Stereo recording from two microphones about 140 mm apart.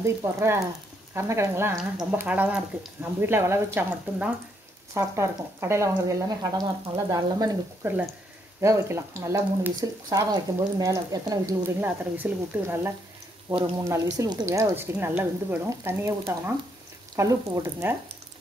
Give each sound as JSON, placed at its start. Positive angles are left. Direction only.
{"t": 0.0, "sound": "speech", "side_deg": -20}